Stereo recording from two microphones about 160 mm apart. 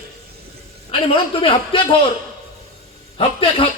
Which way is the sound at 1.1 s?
35° left (ahead or behind).